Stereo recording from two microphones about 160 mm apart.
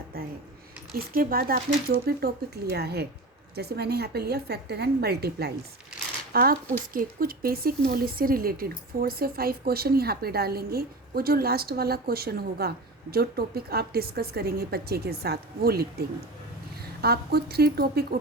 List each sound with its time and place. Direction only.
0.1 s a woman's voice: 70° right (ahead or behind); by 5.5 s 85° right
6.3 s a woman's voice: 70° right (ahead or behind)